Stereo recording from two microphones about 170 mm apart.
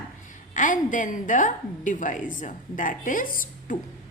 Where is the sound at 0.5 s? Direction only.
50° left (ahead or behind).